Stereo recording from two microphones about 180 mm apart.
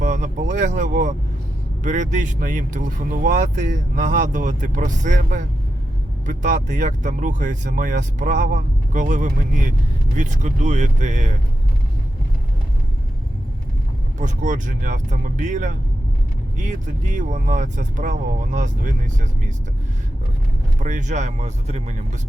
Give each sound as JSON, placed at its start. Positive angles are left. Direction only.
{"t": 0.0, "sound": "speech", "side_deg": -45}
{"t": 14.2, "sound": "speech", "side_deg": -45}
{"t": 20.7, "sound": "speech", "side_deg": -45}